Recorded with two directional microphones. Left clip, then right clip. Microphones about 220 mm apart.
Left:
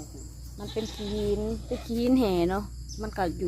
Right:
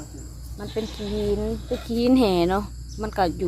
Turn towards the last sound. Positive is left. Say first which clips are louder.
# right 7 dB
turn(degrees=-10)  # may be behind; listen again after turning